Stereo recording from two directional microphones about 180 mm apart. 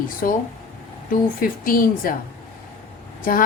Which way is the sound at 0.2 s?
50° left (ahead or behind).